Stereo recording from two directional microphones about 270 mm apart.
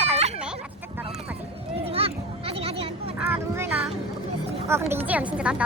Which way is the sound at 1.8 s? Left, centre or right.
Right.